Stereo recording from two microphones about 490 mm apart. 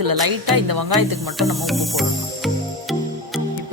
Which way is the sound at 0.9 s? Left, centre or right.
Centre.